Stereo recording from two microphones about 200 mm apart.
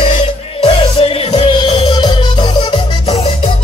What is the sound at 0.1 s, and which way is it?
Music, 30° left (ahead or behind).